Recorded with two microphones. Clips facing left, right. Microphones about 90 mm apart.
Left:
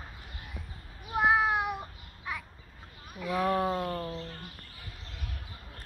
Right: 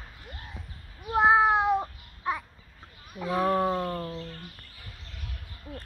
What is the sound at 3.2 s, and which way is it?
Speech, 30° right (ahead or behind).